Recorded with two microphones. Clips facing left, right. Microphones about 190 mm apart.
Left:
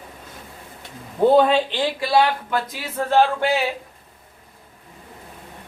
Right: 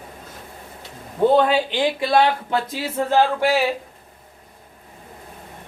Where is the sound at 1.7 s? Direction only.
20° right (ahead or behind).